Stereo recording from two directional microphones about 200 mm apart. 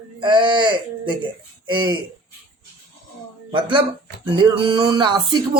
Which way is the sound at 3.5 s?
25° right (ahead or behind).